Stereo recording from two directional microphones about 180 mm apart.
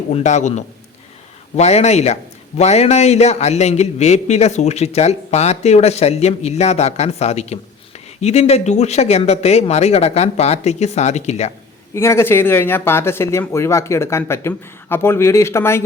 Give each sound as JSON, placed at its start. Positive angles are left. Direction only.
{"t": 0.1, "sound": "a man's voice", "side_deg": 40}
{"t": 11.9, "sound": "speech", "side_deg": 15}